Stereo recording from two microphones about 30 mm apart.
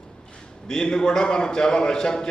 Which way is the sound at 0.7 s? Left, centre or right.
Left.